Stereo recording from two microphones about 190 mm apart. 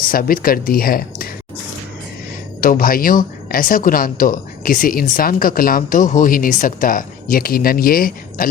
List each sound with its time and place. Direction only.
0.1 s speech: 50° left (ahead or behind)
2.6 s speech: 50° left (ahead or behind)